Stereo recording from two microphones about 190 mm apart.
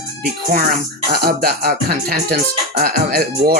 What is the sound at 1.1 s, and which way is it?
Speech, 55° right (ahead or behind).